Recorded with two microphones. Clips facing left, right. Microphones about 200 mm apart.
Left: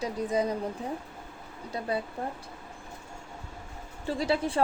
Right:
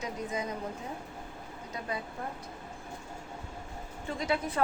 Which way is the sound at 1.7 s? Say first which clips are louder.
Left 6 dB; 35° left (ahead or behind).